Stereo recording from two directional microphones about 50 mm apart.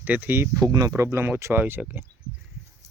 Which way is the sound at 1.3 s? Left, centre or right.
Right.